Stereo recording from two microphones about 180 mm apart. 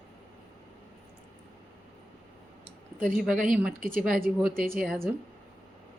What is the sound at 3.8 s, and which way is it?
Speech, 50° right (ahead or behind).